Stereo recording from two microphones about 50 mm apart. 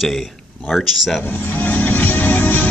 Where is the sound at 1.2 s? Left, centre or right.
Left.